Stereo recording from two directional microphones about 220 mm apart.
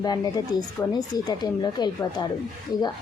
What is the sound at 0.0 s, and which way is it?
Speech, 20° left (ahead or behind).